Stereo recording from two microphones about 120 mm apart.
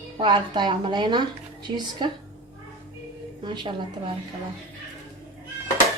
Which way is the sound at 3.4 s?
40° right (ahead or behind).